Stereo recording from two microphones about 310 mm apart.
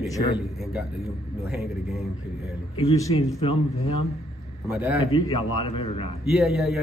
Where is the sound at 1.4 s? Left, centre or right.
Centre.